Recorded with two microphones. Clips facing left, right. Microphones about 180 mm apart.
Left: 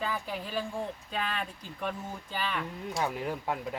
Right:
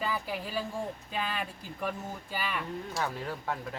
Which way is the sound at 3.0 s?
15° left (ahead or behind).